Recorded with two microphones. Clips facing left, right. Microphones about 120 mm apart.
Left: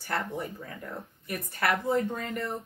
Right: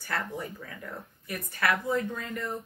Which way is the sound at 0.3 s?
25° left (ahead or behind).